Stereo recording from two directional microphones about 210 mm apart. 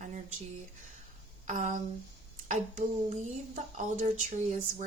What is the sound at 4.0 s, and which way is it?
Speech, 35° right (ahead or behind).